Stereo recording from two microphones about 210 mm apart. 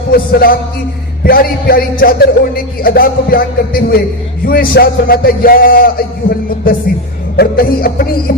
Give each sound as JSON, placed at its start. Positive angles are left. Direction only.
{"t": 0.1, "sound": "speech", "side_deg": 45}
{"t": 7.3, "sound": "speech", "side_deg": 45}